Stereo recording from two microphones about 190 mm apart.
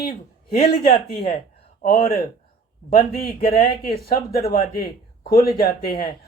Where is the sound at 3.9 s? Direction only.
55° left (ahead or behind).